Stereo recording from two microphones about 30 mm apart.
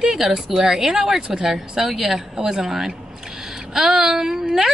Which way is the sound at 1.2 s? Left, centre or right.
Right.